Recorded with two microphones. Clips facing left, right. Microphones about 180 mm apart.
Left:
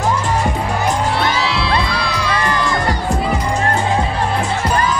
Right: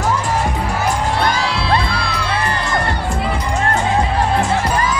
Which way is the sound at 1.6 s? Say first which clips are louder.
Even; 50° right (ahead or behind).